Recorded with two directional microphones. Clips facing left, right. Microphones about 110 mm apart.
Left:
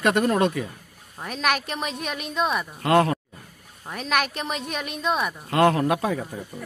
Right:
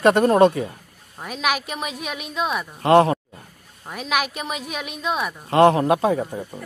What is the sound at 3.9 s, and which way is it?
Speech, 5° right (ahead or behind).